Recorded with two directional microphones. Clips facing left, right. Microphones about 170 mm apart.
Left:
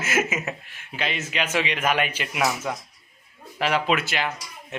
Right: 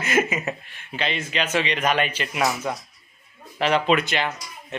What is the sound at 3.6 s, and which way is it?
Speech, 5° left (ahead or behind).